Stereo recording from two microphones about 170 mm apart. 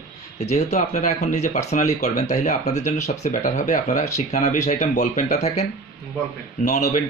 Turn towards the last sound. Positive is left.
turn(degrees=45)  # may be behind; listen again after turning